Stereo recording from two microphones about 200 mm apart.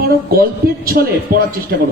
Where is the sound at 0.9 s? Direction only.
45° right (ahead or behind).